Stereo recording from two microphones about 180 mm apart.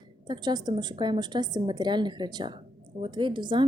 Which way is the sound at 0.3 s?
25° right (ahead or behind).